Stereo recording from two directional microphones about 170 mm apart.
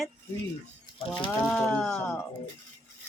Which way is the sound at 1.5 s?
5° left (ahead or behind).